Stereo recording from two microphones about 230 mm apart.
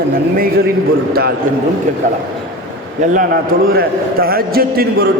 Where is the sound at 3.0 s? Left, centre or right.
Right.